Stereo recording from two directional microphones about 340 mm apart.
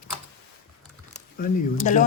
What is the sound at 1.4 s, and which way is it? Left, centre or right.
Speech, left.